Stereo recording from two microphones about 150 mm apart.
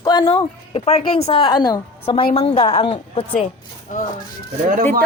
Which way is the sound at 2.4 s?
40° left (ahead or behind).